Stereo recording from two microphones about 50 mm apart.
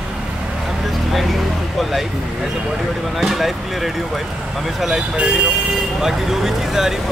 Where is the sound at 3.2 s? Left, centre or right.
Centre.